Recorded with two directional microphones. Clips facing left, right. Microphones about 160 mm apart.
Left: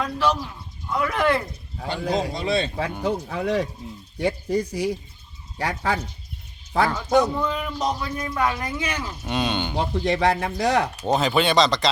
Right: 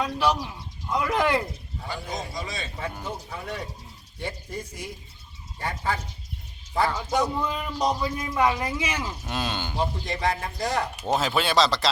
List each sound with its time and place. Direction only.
0.0 s speech: 10° right (ahead or behind)
1.9 s speech: 70° left (ahead or behind); by 3.7 s 90° left
4.2 s speech: 80° left
7.3 s speech: 10° right (ahead or behind)
9.7 s speech: 70° left (ahead or behind)
11.1 s speech: 5° right (ahead or behind)